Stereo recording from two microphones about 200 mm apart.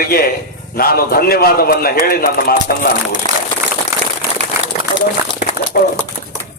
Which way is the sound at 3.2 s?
25° left (ahead or behind).